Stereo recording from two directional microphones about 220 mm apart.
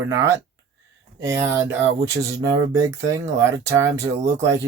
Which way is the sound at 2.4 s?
15° right (ahead or behind).